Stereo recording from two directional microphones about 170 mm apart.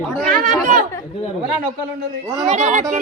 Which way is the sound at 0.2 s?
50° right (ahead or behind).